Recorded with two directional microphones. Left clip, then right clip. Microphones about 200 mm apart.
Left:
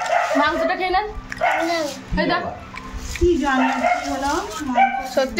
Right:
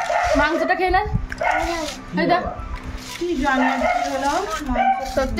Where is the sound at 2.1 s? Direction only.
20° right (ahead or behind).